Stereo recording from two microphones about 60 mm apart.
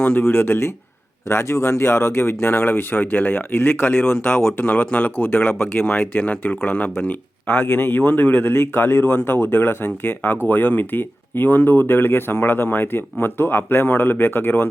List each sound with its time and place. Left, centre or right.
0.0 s speech: left
1.3 s speech: left
4.5 s speech: left